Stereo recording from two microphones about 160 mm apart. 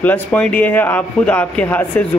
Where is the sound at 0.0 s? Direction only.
10° left (ahead or behind).